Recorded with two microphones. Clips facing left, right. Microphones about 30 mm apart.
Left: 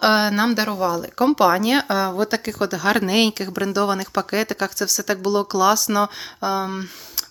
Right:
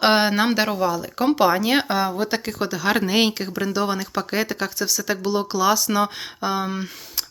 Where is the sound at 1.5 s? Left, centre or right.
Centre.